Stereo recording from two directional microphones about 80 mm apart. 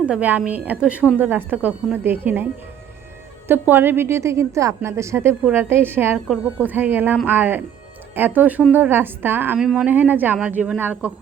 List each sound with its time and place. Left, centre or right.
0.0 s a woman's voice: centre
3.5 s a woman's voice: right
6.1 s a woman's voice: centre
6.6 s a woman's voice: right
9.6 s speech: centre
9.8 s a woman's voice: right